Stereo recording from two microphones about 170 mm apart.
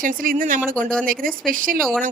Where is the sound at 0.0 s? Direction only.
55° right (ahead or behind).